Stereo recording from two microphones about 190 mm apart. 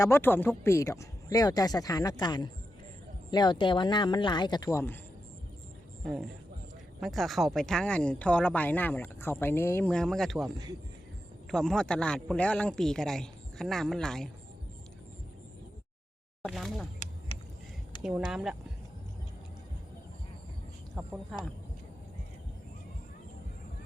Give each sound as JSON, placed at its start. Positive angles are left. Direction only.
{"t": 0.0, "sound": "speech", "side_deg": 10}
{"t": 6.1, "sound": "speech", "side_deg": 0}
{"t": 11.5, "sound": "speech", "side_deg": 5}
{"t": 16.4, "sound": "speech", "side_deg": 0}
{"t": 17.3, "sound": "vehicle", "side_deg": 30}
{"t": 18.0, "sound": "speech", "side_deg": -5}